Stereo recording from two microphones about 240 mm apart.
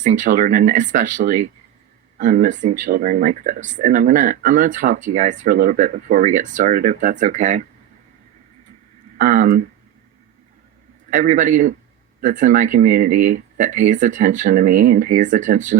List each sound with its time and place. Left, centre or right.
0.0 s speech: right
9.1 s speech: right
11.1 s speech: right